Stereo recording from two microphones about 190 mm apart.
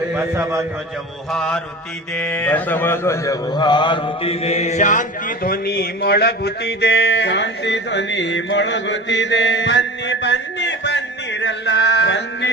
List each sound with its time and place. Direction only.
0.1 s a man's voice: 15° right (ahead or behind)
1.3 s mantra: centre (ahead or behind)
2.1 s speech: 5° left (ahead or behind); by 12.5 s 65° left (ahead or behind)